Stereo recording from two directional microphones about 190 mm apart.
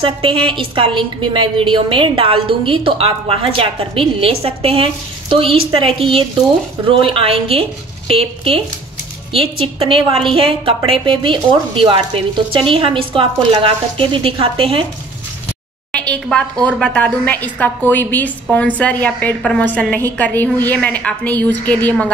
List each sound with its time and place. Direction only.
0.0 s a woman's voice: 30° right (ahead or behind)
15.9 s a woman's voice: 5° left (ahead or behind)